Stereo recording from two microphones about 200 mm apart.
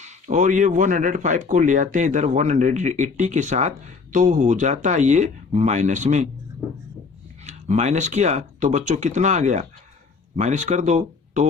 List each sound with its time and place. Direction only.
0.0 s speech: 35° right (ahead or behind)
7.4 s speech: 35° right (ahead or behind)